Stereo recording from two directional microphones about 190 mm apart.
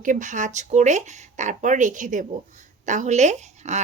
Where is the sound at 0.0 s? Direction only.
45° right (ahead or behind).